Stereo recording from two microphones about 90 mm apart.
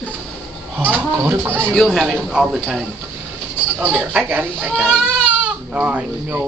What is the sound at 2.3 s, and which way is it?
Speech, 10° right (ahead or behind).